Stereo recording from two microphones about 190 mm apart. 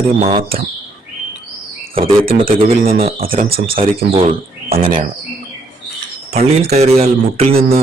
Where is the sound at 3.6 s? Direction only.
30° right (ahead or behind).